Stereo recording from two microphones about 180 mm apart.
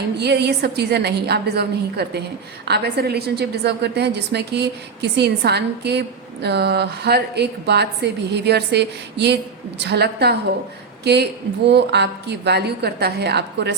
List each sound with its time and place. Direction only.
0.2 s a woman's voice: 70° right (ahead or behind)